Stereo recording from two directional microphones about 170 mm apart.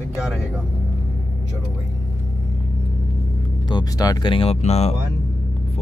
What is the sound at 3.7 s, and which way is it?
Speech, 25° left (ahead or behind).